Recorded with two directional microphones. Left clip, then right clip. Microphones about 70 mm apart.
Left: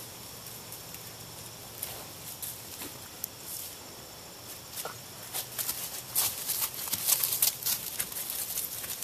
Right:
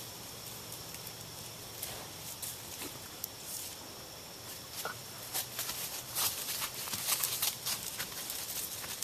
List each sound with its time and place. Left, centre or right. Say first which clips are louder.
5.6 s horse: left 1 dB; left